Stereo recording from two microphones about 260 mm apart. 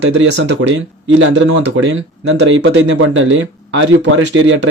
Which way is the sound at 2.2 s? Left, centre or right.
Right.